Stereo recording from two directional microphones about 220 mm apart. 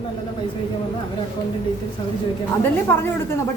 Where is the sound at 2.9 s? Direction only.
10° left (ahead or behind).